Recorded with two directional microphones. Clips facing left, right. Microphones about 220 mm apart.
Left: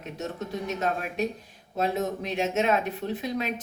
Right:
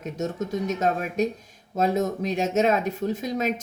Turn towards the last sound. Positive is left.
turn(degrees=-45)  # may be behind; listen again after turning